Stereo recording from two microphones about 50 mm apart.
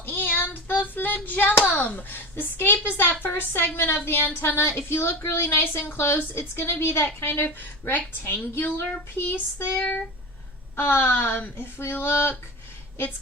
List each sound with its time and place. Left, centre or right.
0.0 s hands: left
2.8 s a woman's voice: left
7.9 s a woman's voice: left
8.8 s a woman's voice: left
10.8 s a woman's voice: left
11.8 s a woman's voice: left